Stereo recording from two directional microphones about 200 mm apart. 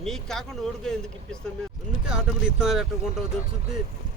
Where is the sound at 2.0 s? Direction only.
5° right (ahead or behind).